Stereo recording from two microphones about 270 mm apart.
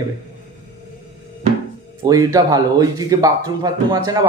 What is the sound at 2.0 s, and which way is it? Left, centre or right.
Speech, centre.